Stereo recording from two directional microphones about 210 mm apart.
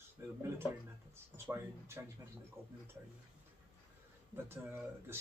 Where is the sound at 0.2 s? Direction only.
15° right (ahead or behind).